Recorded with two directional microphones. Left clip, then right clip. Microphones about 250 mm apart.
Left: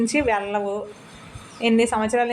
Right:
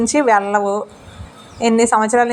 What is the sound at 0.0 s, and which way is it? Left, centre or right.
A woman's voice, centre.